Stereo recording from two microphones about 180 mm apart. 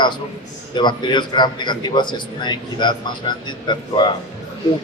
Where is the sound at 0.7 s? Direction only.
25° left (ahead or behind).